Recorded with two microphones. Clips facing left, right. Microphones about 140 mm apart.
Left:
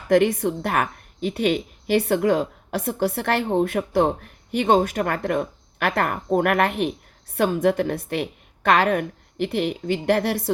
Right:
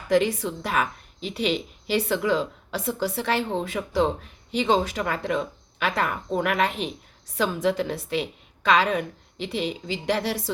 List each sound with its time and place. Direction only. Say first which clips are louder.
0.1 s a woman's voice: left 4 dB; 55° left (ahead or behind)